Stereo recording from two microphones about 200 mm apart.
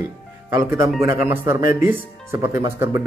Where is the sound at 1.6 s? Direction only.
45° left (ahead or behind).